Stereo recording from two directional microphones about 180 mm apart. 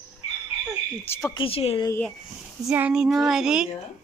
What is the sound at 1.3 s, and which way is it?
Speech, 30° left (ahead or behind).